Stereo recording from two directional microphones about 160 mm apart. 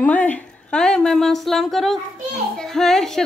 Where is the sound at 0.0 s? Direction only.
10° left (ahead or behind).